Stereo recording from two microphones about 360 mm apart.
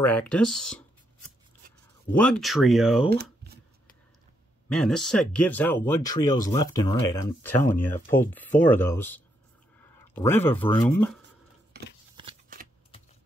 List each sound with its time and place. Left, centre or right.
0.0 s speech: centre
4.6 s speech: centre
12.2 s shuffling cards: centre